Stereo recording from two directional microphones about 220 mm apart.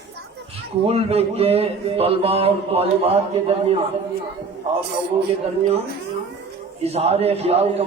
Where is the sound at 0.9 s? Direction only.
25° right (ahead or behind).